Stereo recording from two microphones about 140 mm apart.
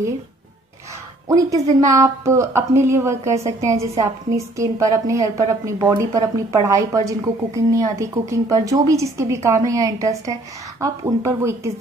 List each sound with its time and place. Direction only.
1.3 s a woman's voice: 25° right (ahead or behind)